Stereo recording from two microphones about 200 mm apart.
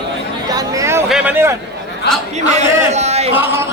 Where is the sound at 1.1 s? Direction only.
5° right (ahead or behind).